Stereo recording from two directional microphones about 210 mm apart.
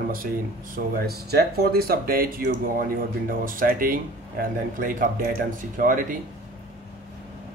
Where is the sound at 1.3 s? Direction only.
45° right (ahead or behind).